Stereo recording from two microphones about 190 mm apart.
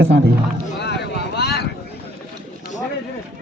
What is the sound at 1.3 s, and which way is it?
Vehicle, 60° left (ahead or behind).